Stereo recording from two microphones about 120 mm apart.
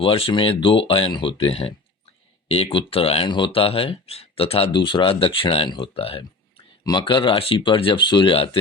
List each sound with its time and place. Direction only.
0.0 s speech: 50° left (ahead or behind)
3.2 s speech: 40° left (ahead or behind)
4.7 s speech: 40° left (ahead or behind)
6.8 s speech: 40° left (ahead or behind)